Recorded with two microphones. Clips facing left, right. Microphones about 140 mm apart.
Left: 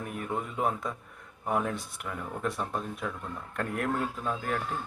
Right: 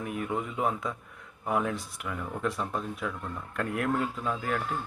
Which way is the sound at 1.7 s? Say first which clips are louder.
Right 1 dB; 55° left (ahead or behind).